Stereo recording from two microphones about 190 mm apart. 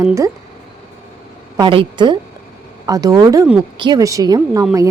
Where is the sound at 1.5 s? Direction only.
25° right (ahead or behind).